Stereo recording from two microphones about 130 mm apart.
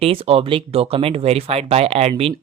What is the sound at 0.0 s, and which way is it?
Speech, 45° right (ahead or behind).